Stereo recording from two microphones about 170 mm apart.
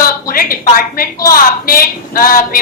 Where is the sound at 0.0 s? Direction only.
60° left (ahead or behind).